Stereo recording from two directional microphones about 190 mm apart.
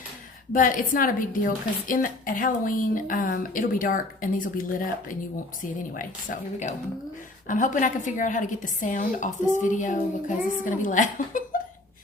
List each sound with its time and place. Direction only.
0.5 s a woman's voice: 45° left (ahead or behind)